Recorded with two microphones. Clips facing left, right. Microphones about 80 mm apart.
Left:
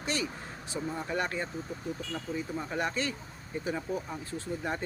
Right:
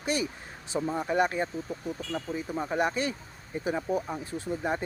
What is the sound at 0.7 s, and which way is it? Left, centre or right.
Speech, right.